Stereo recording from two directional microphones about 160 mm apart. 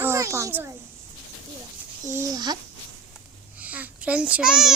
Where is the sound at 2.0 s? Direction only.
20° right (ahead or behind).